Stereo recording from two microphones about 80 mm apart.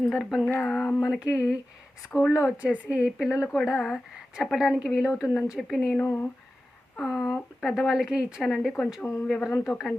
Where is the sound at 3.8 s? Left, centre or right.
Centre.